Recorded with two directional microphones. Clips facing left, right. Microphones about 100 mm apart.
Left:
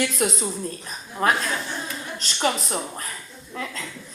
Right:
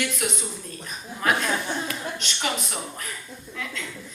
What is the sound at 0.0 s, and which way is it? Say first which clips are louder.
A woman's voice: left 4 dB; 35° left (ahead or behind).